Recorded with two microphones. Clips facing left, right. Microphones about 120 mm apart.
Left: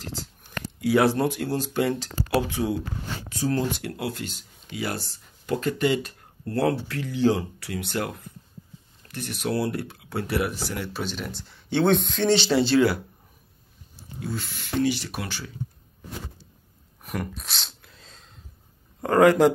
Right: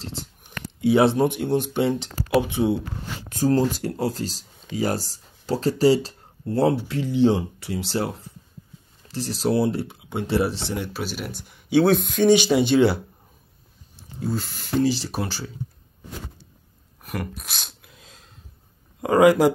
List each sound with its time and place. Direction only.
0.0 s speech: 25° right (ahead or behind)
3.3 s speech: 45° right (ahead or behind)
6.4 s speech: 20° right (ahead or behind)
10.9 s speech: 5° right (ahead or behind); by 13.0 s 25° right (ahead or behind)
14.2 s speech: 40° right (ahead or behind)
17.0 s a sound: centre (ahead or behind)
18.9 s speech: 10° right (ahead or behind)